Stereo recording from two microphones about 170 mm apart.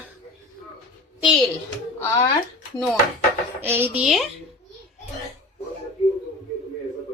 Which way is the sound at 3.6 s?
15° right (ahead or behind).